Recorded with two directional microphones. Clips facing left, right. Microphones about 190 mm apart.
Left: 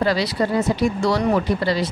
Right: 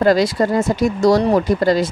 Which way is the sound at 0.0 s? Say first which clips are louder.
Right 6 dB; 45° right (ahead or behind).